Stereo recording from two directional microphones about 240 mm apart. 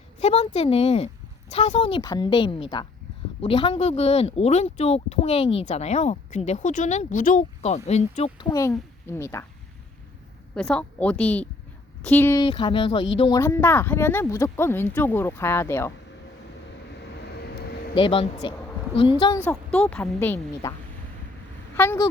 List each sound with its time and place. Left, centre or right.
0.2 s speech: left; by 9.5 s centre
10.5 s a woman's voice: centre
17.9 s speech: left
19.5 s speech: centre
21.8 s speech: centre